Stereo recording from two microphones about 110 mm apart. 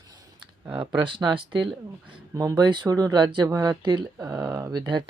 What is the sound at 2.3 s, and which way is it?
Speech, 35° right (ahead or behind).